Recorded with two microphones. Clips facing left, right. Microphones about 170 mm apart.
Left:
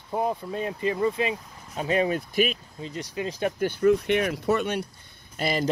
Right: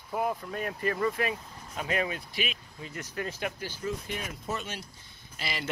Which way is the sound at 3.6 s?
60° left (ahead or behind).